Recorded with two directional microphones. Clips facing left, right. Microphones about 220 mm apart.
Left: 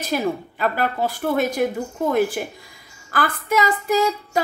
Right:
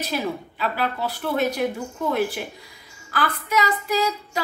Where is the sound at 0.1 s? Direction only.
50° left (ahead or behind).